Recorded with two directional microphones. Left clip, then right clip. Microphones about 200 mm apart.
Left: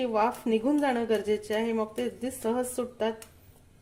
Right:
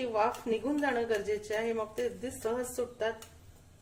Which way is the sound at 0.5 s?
45° left (ahead or behind).